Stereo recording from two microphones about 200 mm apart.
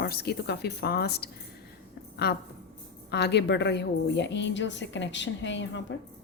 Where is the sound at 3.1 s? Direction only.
55° left (ahead or behind).